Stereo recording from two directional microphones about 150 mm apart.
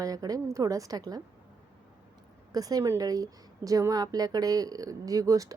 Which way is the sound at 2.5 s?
25° right (ahead or behind).